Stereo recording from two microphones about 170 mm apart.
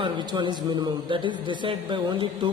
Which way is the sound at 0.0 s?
25° right (ahead or behind).